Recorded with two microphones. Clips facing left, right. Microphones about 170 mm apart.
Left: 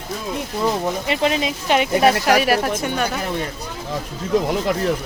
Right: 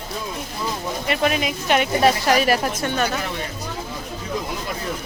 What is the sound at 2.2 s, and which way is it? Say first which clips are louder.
Speech: left 2 dB; 5° left (ahead or behind).